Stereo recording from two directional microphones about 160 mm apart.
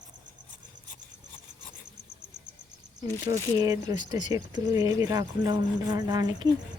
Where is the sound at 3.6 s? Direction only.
25° right (ahead or behind).